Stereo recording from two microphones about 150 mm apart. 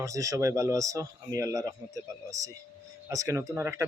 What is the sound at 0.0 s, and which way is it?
Speech, 20° right (ahead or behind).